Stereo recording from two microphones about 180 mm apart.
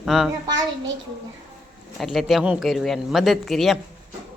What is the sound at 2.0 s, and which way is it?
Speech, centre (ahead or behind).